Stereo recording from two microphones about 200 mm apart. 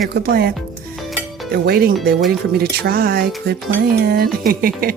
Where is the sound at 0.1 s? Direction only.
50° right (ahead or behind).